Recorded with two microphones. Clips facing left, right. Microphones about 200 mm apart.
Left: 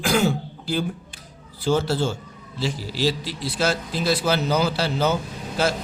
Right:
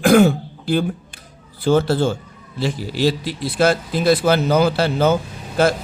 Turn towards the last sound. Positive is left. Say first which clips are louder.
# right 6 dB
turn(degrees=-55)  # may be behind; listen again after turning